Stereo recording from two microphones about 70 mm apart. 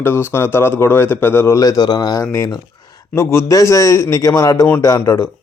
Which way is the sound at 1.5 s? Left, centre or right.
Left.